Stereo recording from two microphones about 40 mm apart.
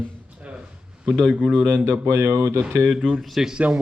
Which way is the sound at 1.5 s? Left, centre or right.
Centre.